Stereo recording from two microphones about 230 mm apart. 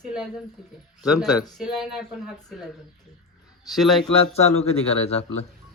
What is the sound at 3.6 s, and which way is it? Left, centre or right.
Speech, centre.